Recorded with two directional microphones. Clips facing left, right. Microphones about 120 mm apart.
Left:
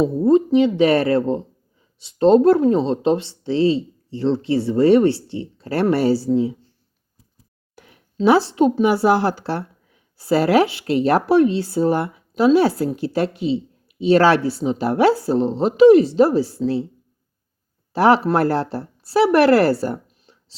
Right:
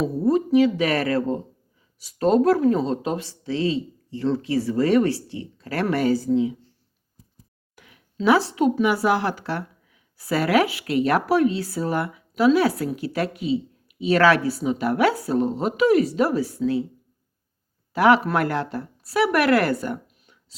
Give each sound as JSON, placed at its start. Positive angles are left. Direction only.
{"t": 0.0, "sound": "a woman's voice", "side_deg": 25}
{"t": 7.8, "sound": "a woman's voice", "side_deg": 35}
{"t": 17.9, "sound": "speech", "side_deg": 30}